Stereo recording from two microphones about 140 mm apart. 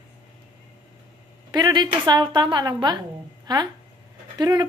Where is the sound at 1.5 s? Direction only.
30° right (ahead or behind).